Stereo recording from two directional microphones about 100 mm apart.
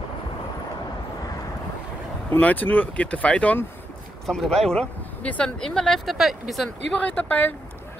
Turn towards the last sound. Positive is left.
turn(degrees=20)  # may be behind; listen again after turning